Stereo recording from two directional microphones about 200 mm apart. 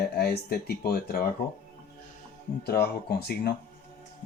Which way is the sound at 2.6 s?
55° left (ahead or behind).